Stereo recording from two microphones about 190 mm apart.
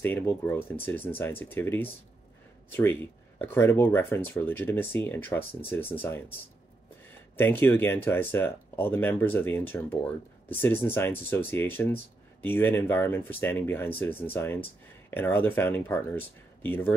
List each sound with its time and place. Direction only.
0.0 s speech: 10° left (ahead or behind)
5.4 s speech: 30° left (ahead or behind)
5.7 s speech: 10° left (ahead or behind)
7.3 s speech: 10° left (ahead or behind)